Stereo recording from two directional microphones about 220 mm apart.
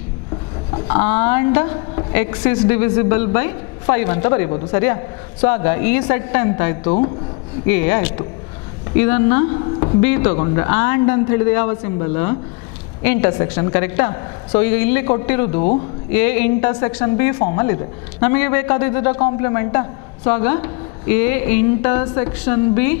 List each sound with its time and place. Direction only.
0.8 s a woman's voice: 15° left (ahead or behind)
6.8 s speech: 30° left (ahead or behind)
7.6 s a woman's voice: 10° left (ahead or behind)
9.8 s a sound: 25° left (ahead or behind)
10.0 s a woman's voice: 10° left (ahead or behind)